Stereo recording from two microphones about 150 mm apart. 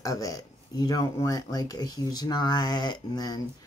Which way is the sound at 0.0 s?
20° left (ahead or behind).